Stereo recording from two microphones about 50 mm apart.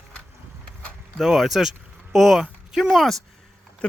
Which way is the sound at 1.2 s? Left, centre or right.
Centre.